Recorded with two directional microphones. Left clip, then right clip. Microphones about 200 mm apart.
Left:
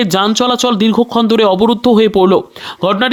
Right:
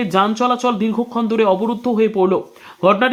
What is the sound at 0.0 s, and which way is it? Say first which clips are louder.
Speech: left 4 dB; 35° left (ahead or behind).